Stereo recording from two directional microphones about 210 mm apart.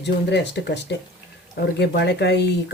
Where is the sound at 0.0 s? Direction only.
55° left (ahead or behind).